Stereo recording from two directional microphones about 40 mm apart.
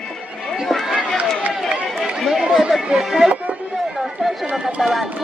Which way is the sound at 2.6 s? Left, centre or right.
Centre.